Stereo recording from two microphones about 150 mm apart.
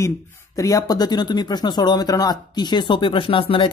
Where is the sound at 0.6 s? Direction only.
20° left (ahead or behind).